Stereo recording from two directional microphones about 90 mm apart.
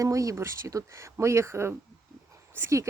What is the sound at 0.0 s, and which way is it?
Speech, 35° right (ahead or behind).